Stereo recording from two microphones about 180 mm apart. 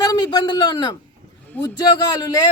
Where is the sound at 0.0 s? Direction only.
20° left (ahead or behind).